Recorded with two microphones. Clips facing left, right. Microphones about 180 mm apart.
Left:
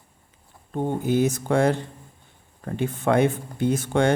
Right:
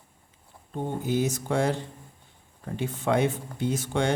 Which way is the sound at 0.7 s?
55° left (ahead or behind).